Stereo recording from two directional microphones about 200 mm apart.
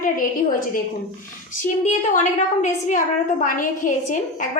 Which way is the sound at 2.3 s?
35° left (ahead or behind).